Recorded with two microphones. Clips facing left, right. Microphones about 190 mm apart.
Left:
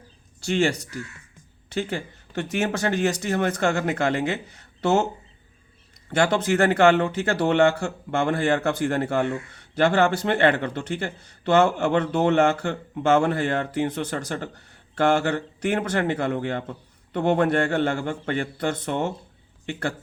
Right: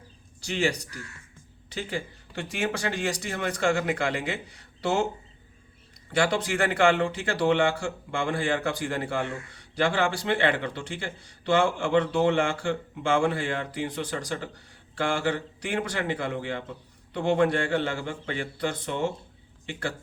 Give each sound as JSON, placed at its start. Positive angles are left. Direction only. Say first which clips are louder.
{"t": 0.5, "sound": "speech", "louder": "left 5 dB", "side_deg": 45}
{"t": 6.1, "sound": "speech", "louder": "left 4 dB", "side_deg": 45}